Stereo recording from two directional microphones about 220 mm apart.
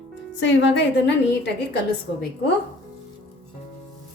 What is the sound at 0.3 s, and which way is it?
Speech, 55° left (ahead or behind).